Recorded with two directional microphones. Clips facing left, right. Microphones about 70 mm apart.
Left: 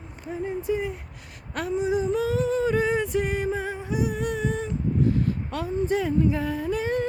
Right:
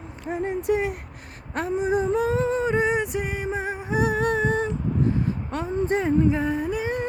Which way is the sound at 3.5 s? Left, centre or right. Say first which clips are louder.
Right 1 dB; centre.